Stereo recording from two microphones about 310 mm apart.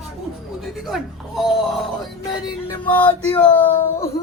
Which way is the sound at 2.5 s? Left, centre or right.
Centre.